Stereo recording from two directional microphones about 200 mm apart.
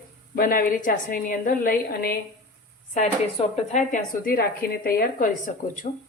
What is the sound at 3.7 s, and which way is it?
A woman's voice, 40° left (ahead or behind).